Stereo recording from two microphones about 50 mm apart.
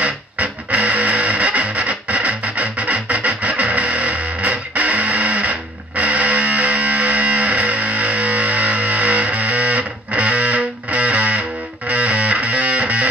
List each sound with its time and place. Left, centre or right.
0.0 s music: right